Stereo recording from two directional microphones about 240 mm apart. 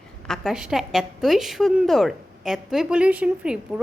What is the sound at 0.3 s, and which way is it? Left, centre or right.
A woman's voice, centre.